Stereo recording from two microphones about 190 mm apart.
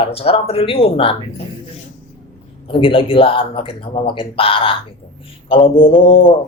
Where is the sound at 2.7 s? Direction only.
25° left (ahead or behind).